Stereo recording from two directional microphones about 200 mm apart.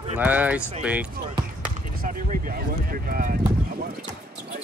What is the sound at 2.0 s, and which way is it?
Speech, 45° right (ahead or behind).